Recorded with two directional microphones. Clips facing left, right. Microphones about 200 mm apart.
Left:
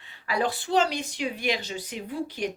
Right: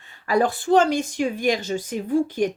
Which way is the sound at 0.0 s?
45° right (ahead or behind).